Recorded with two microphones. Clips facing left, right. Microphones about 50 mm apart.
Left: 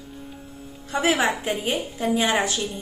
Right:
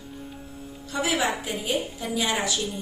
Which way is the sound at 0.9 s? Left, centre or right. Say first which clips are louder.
Left 4 dB; left.